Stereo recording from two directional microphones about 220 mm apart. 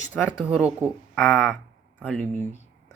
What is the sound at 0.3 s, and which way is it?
Speech, 5° right (ahead or behind).